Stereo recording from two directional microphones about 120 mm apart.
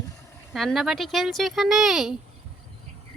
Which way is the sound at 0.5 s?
Centre (ahead or behind).